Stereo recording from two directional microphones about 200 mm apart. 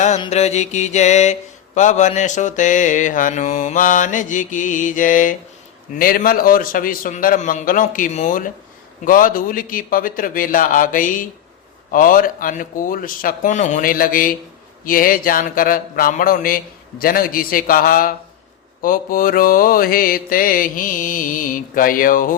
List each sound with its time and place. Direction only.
0.2 s mantra: 35° left (ahead or behind)